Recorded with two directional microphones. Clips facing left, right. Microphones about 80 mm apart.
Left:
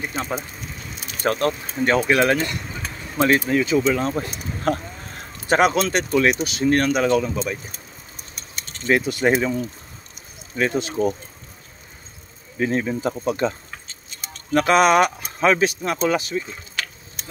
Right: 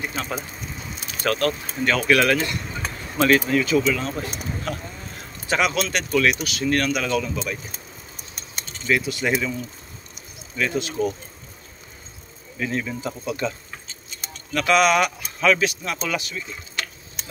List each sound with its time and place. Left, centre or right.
0.1 s speech: left
4.7 s speech: left
5.0 s a sound: left
6.0 s speech: left
8.8 s speech: left
12.5 s speech: left